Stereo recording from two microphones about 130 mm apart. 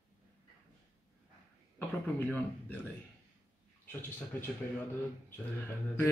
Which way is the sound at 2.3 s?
10° left (ahead or behind).